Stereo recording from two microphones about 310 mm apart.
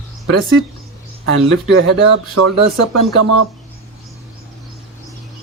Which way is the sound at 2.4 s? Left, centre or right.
Right.